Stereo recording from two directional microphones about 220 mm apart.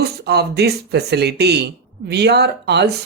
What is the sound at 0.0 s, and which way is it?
Speech, 50° right (ahead or behind).